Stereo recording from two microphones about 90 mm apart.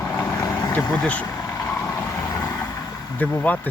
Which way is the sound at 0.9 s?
15° left (ahead or behind).